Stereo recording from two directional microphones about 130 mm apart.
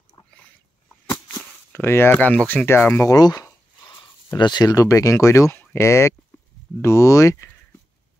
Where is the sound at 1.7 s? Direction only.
15° left (ahead or behind).